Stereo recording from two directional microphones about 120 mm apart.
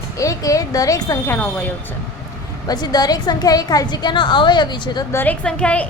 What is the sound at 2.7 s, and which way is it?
A woman's voice, 35° left (ahead or behind).